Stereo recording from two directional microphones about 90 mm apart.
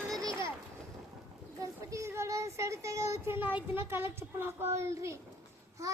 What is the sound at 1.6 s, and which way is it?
Child singing, 35° right (ahead or behind).